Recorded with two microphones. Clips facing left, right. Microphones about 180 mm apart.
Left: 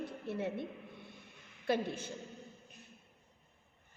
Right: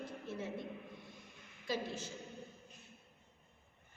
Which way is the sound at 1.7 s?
60° left (ahead or behind).